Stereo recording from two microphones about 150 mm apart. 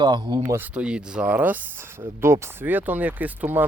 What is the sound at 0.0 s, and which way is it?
Speech, 30° right (ahead or behind).